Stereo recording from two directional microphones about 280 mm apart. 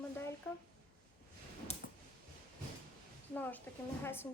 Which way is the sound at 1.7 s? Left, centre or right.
Left.